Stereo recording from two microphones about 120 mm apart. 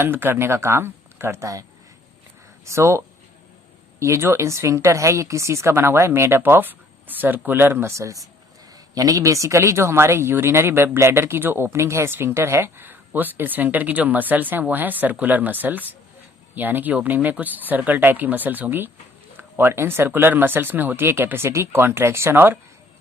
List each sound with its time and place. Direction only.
0.0 s speech: 20° right (ahead or behind)
2.6 s speech: 25° right (ahead or behind)
4.0 s speech: 25° right (ahead or behind)